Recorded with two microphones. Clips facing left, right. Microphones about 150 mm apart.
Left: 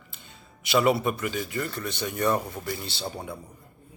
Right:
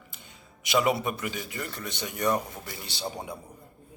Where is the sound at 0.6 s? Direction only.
15° right (ahead or behind).